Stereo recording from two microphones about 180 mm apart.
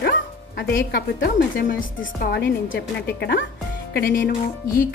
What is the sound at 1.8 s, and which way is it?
Speech, 80° left.